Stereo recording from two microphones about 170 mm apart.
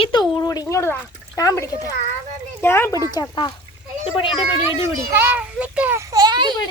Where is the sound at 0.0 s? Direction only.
25° left (ahead or behind).